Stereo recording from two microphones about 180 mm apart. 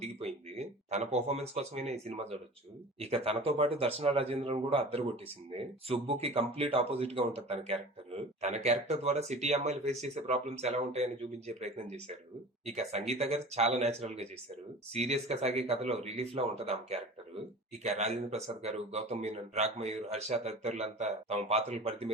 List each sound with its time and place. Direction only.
0.0 s speech: 35° right (ahead or behind)